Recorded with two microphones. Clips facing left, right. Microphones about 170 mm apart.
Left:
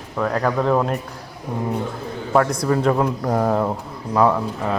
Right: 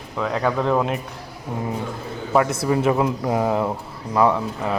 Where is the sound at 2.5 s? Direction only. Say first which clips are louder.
Left 1 dB; 5° right (ahead or behind).